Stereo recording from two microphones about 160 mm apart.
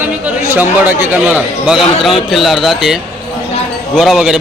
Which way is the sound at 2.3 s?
Centre (ahead or behind).